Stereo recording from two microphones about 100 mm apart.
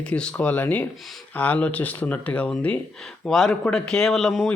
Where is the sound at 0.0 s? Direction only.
10° left (ahead or behind).